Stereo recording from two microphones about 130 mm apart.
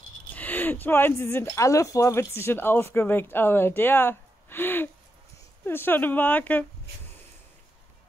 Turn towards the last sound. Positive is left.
turn(degrees=15)  # may be behind; listen again after turning